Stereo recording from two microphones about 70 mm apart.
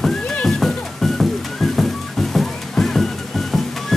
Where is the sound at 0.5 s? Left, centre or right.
Centre.